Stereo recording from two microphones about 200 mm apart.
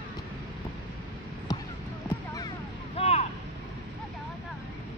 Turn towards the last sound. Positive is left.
turn(degrees=30)  # may be behind; listen again after turning